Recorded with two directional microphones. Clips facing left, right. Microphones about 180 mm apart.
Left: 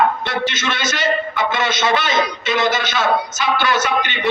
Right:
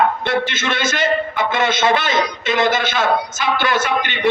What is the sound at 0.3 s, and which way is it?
A man's voice, 55° right (ahead or behind).